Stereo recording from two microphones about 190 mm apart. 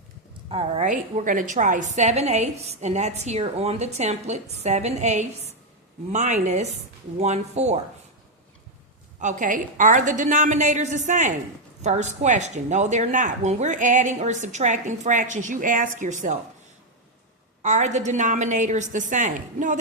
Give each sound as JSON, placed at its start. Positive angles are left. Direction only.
{"t": 0.5, "sound": "a woman's voice", "side_deg": -35}
{"t": 9.2, "sound": "a woman's voice", "side_deg": -40}
{"t": 17.6, "sound": "a woman's voice", "side_deg": -40}